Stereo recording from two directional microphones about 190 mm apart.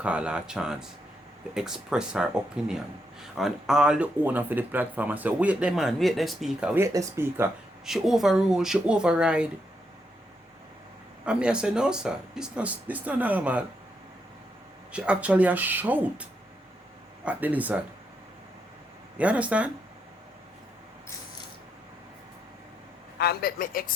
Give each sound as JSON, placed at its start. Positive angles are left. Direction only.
{"t": 0.0, "sound": "speech", "side_deg": -5}
{"t": 6.8, "sound": "speech", "side_deg": -15}
{"t": 7.9, "sound": "speech", "side_deg": 0}
{"t": 11.3, "sound": "speech", "side_deg": -5}
{"t": 14.9, "sound": "speech", "side_deg": -5}
{"t": 19.1, "sound": "speech", "side_deg": -5}
{"t": 23.1, "sound": "a woman's voice", "side_deg": 55}